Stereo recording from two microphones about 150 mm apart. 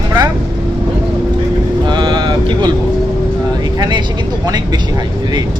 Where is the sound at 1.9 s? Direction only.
30° right (ahead or behind).